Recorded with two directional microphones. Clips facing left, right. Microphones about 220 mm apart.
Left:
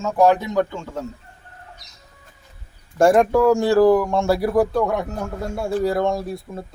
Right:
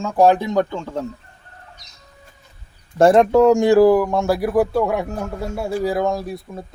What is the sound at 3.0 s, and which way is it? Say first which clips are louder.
Speech: right 3 dB; 25° right (ahead or behind).